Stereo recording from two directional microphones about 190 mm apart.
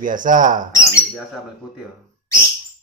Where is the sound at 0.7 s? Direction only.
15° left (ahead or behind).